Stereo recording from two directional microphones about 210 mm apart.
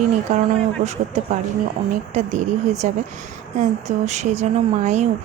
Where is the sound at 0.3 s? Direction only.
35° right (ahead or behind).